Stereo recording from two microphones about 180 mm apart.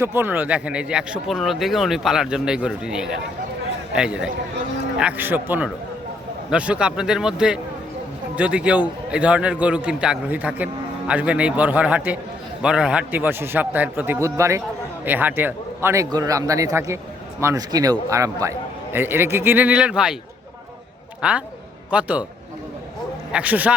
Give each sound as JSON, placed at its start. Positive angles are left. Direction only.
{"t": 0.0, "sound": "a man's voice", "side_deg": -10}
{"t": 21.2, "sound": "a man's voice", "side_deg": -5}
{"t": 23.3, "sound": "a man's voice", "side_deg": -10}